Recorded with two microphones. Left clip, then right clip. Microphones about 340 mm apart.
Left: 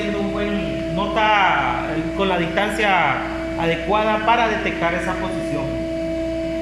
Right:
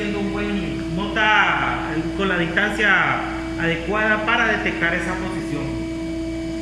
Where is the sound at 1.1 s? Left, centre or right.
Centre.